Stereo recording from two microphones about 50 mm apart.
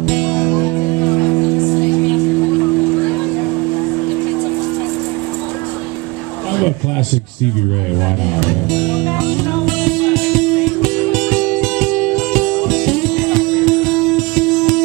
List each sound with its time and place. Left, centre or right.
0.0 s music: centre
0.3 s music: left
8.9 s music: centre